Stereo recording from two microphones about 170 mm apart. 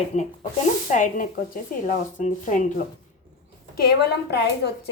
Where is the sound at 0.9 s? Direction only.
50° left (ahead or behind).